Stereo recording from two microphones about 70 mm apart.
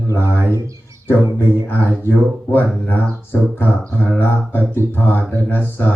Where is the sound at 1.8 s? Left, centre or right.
Left.